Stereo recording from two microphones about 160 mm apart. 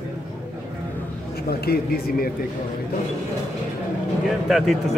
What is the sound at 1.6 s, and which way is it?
Speech, 80° left.